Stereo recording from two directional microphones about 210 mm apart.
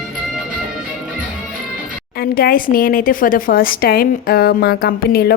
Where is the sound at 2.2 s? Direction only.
45° left (ahead or behind).